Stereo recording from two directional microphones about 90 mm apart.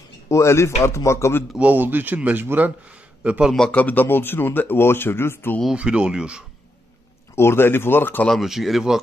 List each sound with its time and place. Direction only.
0.3 s speech: 30° left (ahead or behind)
1.6 s speech: 20° right (ahead or behind)
3.3 s speech: 10° right (ahead or behind)
3.7 s speech: 20° left (ahead or behind)
5.8 s speech: 10° right (ahead or behind)
7.3 s speech: 25° left (ahead or behind)
8.3 s speech: centre (ahead or behind)